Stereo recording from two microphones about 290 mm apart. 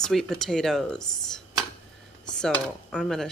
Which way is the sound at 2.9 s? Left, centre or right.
Centre.